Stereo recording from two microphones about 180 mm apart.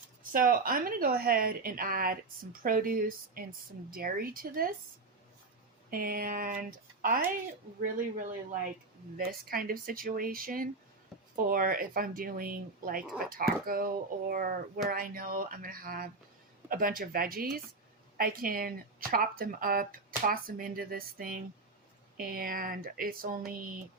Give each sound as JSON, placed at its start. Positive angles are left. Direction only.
{"t": 0.2, "sound": "speech", "side_deg": -50}
{"t": 5.9, "sound": "speech", "side_deg": -55}
{"t": 13.0, "sound": "speech", "side_deg": -5}
{"t": 13.3, "sound": "speech", "side_deg": -55}